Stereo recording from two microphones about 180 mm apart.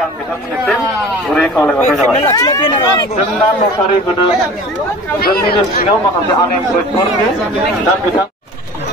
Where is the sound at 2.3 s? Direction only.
20° left (ahead or behind).